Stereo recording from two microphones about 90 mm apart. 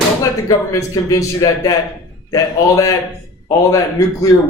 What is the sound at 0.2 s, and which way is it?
Speech, 35° left (ahead or behind).